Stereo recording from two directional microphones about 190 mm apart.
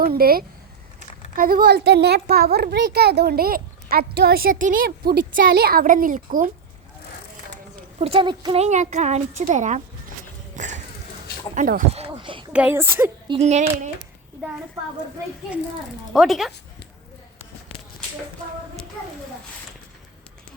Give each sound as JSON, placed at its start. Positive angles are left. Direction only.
{"t": 0.0, "sound": "a child's voice", "side_deg": -50}
{"t": 7.9, "sound": "speech", "side_deg": -30}
{"t": 8.6, "sound": "a child's voice", "side_deg": -40}
{"t": 10.5, "sound": "a sound", "side_deg": -40}
{"t": 11.5, "sound": "a child's voice", "side_deg": -50}
{"t": 11.9, "sound": "speech", "side_deg": -30}
{"t": 12.5, "sound": "a woman's voice", "side_deg": -10}
{"t": 13.2, "sound": "a child's voice", "side_deg": -30}
{"t": 16.1, "sound": "speech", "side_deg": 0}